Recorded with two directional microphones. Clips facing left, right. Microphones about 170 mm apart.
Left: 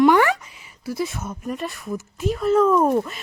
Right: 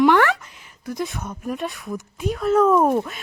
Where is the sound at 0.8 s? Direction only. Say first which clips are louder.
Left 1 dB; 5° left (ahead or behind).